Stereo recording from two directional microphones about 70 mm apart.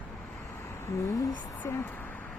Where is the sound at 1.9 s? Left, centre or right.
Left.